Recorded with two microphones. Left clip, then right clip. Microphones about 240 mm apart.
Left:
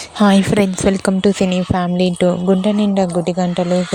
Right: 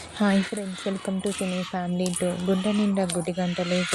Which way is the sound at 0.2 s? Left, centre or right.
Left.